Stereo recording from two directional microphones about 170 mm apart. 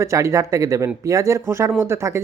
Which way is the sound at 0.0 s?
15° right (ahead or behind).